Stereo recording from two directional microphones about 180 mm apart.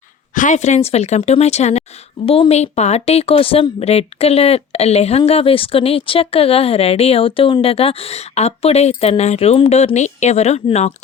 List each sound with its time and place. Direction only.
0.3 s speech: 40° left (ahead or behind)